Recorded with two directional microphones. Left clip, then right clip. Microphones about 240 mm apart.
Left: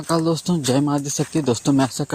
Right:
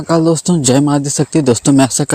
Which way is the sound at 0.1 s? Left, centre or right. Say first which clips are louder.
Right 8 dB; right.